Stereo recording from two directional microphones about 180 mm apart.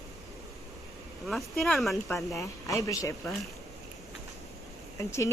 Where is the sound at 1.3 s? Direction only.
Centre (ahead or behind).